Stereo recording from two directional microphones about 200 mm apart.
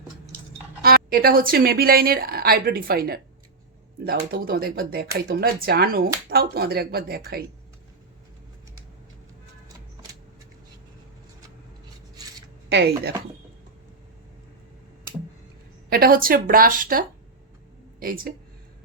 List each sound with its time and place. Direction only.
0.8 s speech: 50° right (ahead or behind)
12.6 s a sound: 55° right (ahead or behind)
15.9 s speech: 50° right (ahead or behind)